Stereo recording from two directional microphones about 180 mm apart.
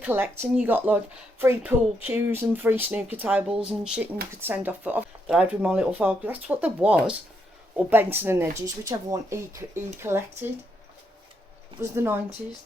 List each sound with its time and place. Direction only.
0.0 s speech: 10° right (ahead or behind)
11.8 s speech: 15° right (ahead or behind)